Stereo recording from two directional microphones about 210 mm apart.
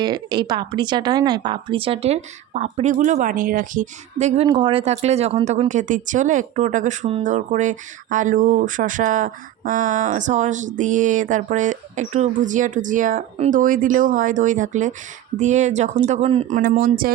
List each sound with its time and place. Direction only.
0.0 s speech: 20° right (ahead or behind); by 17.1 s 45° right (ahead or behind)